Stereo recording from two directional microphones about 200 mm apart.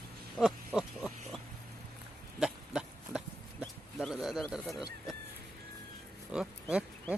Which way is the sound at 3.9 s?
Centre (ahead or behind).